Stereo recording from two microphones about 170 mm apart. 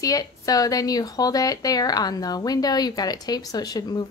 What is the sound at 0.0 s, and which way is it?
A woman's voice, 20° left (ahead or behind).